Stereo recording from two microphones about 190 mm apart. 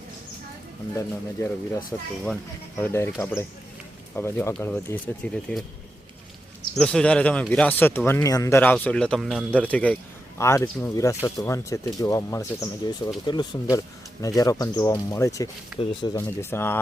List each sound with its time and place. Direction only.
0.9 s speech: 10° left (ahead or behind)
6.7 s speech: 5° left (ahead or behind)
15.7 s speech: 5° right (ahead or behind)
16.1 s speech: 10° left (ahead or behind)